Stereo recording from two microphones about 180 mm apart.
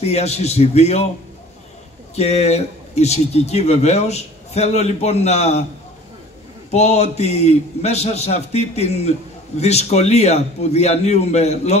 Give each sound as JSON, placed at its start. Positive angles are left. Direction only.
{"t": 0.0, "sound": "speech", "side_deg": 35}
{"t": 2.1, "sound": "speech", "side_deg": 35}
{"t": 6.7, "sound": "speech", "side_deg": 35}